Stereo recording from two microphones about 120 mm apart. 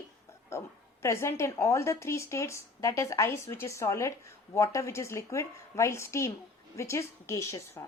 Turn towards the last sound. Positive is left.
turn(degrees=25)  # may be behind; listen again after turning